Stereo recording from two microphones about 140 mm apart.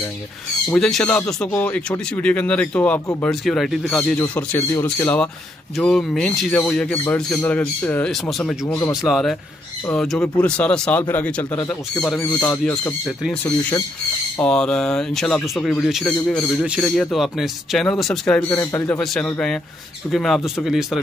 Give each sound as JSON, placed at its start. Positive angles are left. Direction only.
{"t": 0.7, "sound": "speech", "side_deg": 5}
{"t": 4.4, "sound": "speech", "side_deg": 15}
{"t": 5.8, "sound": "speech", "side_deg": 5}
{"t": 8.1, "sound": "speech", "side_deg": 0}
{"t": 16.6, "sound": "speech", "side_deg": -5}
{"t": 18.5, "sound": "speech", "side_deg": 20}
{"t": 18.9, "sound": "speech", "side_deg": 10}